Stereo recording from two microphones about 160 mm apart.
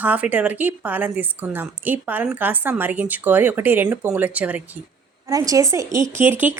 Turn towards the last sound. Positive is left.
turn(degrees=-10)  # may be behind; listen again after turning